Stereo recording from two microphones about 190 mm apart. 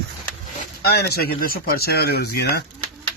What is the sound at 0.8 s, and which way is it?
Speech, 55° left (ahead or behind).